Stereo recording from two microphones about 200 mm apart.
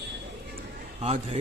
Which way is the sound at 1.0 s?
30° right (ahead or behind).